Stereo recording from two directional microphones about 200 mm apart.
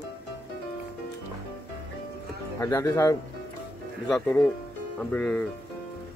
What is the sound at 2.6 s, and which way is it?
Speech, 15° left (ahead or behind).